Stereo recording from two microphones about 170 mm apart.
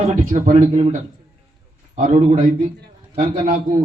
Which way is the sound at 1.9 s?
45° right (ahead or behind).